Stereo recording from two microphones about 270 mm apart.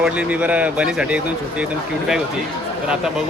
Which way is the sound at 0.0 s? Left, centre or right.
Centre.